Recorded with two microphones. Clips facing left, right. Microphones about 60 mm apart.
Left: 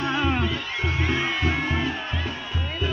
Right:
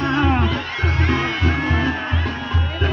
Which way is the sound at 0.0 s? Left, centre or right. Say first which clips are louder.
Right 5 dB; right.